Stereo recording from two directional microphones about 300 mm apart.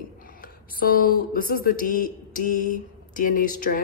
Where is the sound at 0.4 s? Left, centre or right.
Left.